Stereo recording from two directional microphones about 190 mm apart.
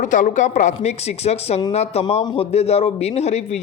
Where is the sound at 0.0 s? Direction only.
40° left (ahead or behind).